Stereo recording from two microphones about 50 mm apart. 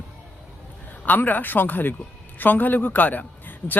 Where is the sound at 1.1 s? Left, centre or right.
Left.